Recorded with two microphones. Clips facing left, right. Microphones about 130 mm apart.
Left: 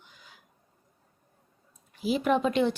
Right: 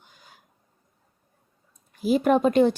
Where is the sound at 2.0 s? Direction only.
45° right (ahead or behind).